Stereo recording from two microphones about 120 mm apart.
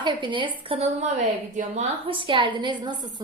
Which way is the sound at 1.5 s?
90° right.